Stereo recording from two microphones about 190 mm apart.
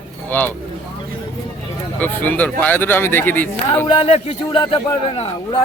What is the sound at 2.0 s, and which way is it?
A man's voice, 10° left (ahead or behind).